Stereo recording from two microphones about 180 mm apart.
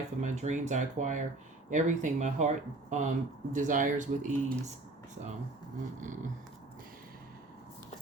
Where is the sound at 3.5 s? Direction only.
45° right (ahead or behind).